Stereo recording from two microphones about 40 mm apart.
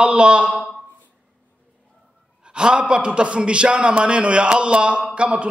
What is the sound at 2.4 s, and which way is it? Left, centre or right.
A man's voice, right.